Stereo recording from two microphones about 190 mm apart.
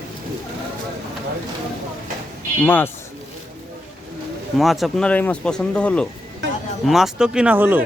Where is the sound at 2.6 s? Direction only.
10° left (ahead or behind).